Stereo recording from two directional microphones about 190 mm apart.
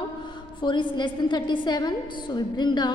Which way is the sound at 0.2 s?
25° left (ahead or behind).